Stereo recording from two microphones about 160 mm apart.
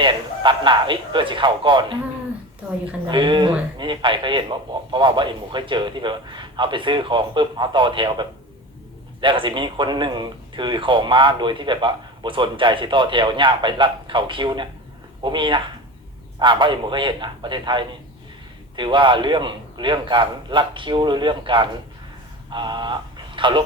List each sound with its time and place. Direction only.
0.0 s speech: 30° right (ahead or behind)
3.1 s a man's voice: 30° right (ahead or behind)